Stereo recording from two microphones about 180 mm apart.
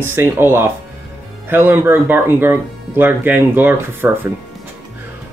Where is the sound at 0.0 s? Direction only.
10° right (ahead or behind).